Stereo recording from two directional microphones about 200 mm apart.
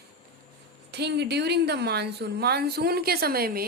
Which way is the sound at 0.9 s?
55° right (ahead or behind).